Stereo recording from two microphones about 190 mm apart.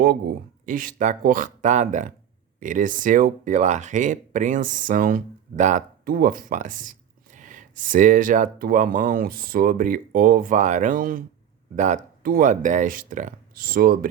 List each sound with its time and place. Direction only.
0.6 s speech: 45° right (ahead or behind)